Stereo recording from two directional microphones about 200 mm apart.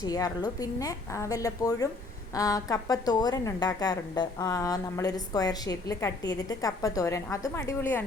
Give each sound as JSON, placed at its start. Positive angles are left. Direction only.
{"t": 0.0, "sound": "a woman's voice", "side_deg": 20}